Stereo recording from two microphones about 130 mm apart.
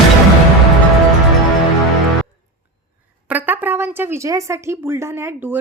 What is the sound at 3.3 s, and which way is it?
Speech, 15° right (ahead or behind).